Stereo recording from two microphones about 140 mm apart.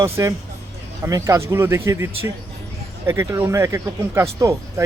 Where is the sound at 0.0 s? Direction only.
20° right (ahead or behind).